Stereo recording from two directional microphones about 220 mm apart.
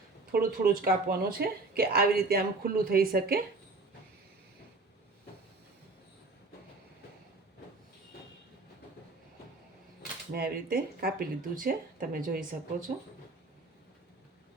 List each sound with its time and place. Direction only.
0.3 s speech: 45° right (ahead or behind)
10.3 s speech: 40° right (ahead or behind)